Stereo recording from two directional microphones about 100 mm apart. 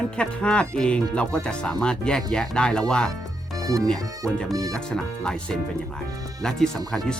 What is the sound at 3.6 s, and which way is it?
Speech, 35° right (ahead or behind).